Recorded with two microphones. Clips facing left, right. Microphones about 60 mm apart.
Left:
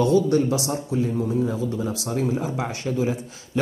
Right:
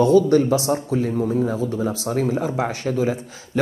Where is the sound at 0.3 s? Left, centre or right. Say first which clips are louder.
Right 4 dB; right.